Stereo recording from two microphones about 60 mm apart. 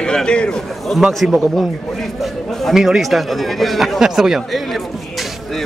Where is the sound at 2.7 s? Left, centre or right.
Centre.